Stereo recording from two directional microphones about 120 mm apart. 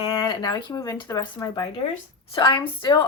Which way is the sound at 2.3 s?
45° left (ahead or behind).